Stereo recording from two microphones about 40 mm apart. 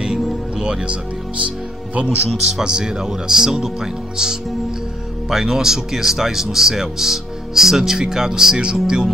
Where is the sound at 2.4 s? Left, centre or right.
Centre.